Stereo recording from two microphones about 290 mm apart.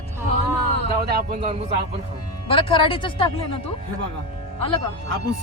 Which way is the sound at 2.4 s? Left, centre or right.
Centre.